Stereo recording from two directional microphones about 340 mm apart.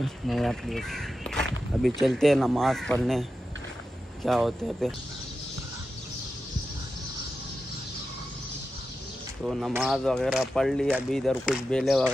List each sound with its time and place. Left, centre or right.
0.0 s speech: centre
9.5 s speech: centre